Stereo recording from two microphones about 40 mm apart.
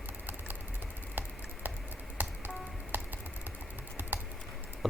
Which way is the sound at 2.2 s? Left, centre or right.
Right.